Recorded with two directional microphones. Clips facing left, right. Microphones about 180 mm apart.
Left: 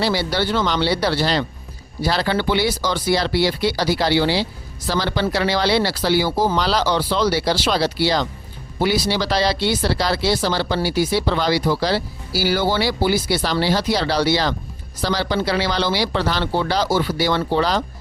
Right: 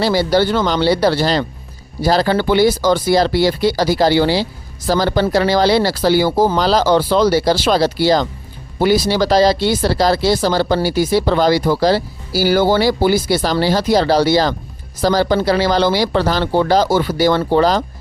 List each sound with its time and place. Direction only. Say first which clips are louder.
0.0 s speech: right 6 dB; 45° right (ahead or behind)